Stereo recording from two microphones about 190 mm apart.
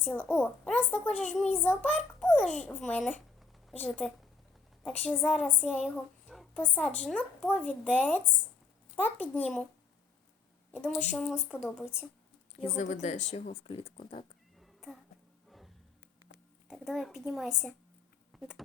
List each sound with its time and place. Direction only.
0.0 s a woman's voice: 10° left (ahead or behind)
10.7 s a child's voice: 10° left (ahead or behind)
12.6 s speech: 35° left (ahead or behind)
14.6 s cat: centre (ahead or behind)
15.4 s music: centre (ahead or behind)
16.6 s a child's voice: centre (ahead or behind)
18.3 s insect: 5° right (ahead or behind)